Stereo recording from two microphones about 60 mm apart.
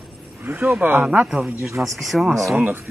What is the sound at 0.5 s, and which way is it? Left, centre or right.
Speech, right.